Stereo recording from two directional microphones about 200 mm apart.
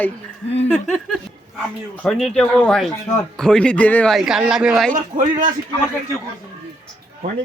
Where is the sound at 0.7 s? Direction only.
Centre (ahead or behind).